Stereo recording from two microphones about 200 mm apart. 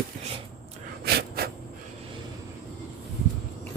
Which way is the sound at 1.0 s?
55° right (ahead or behind).